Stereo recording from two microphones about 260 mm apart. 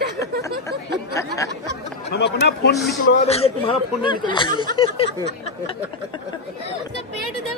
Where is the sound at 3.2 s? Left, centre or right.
Left.